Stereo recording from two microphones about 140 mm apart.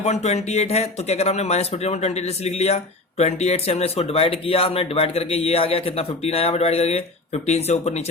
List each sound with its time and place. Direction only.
0.0 s speech: 50° left (ahead or behind)